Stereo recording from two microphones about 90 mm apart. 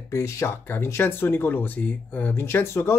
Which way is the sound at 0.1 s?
35° left (ahead or behind).